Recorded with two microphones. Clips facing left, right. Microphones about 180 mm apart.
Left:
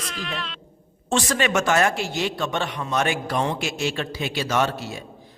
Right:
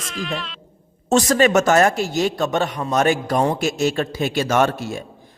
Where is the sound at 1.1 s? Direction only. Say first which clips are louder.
Right 7 dB; 40° right (ahead or behind).